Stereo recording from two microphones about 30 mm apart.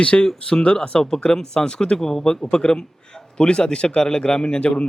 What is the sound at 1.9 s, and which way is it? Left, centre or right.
A man's voice, centre.